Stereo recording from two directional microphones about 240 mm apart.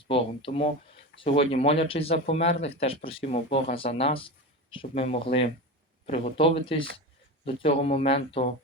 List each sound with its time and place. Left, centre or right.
0.0 s speech: left